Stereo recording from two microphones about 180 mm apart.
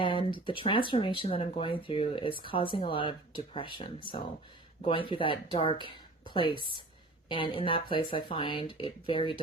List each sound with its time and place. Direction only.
0.0 s speech: 30° left (ahead or behind)